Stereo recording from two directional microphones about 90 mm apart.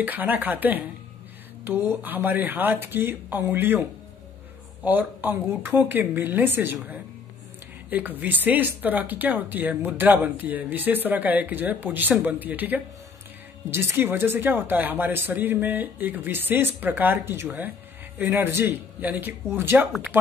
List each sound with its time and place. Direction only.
0.0 s speech: 20° right (ahead or behind)
4.8 s speech: 20° right (ahead or behind)